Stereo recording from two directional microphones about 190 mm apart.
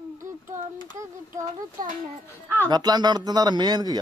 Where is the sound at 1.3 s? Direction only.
45° right (ahead or behind).